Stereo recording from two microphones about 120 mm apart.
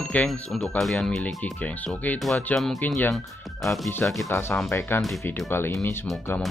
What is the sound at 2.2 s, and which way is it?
Speech, centre (ahead or behind).